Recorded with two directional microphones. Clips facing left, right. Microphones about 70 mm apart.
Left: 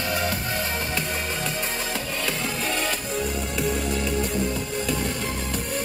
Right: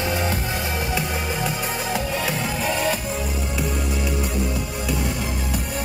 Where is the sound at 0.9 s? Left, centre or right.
Centre.